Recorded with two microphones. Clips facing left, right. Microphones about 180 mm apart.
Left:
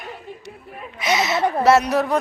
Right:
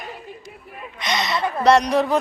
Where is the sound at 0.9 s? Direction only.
5° left (ahead or behind).